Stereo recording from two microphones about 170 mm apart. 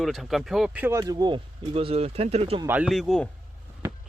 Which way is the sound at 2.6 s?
10° right (ahead or behind).